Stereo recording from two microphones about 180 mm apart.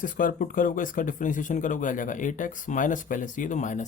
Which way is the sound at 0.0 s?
50° left (ahead or behind).